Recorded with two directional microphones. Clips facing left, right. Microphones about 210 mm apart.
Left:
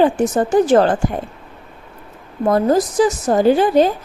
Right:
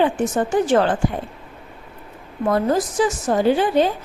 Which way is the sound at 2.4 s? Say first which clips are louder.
Left 4 dB; 40° left (ahead or behind).